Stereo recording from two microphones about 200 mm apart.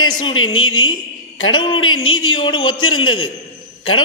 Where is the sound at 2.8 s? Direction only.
90° left.